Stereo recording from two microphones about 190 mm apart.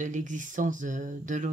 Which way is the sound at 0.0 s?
40° right (ahead or behind).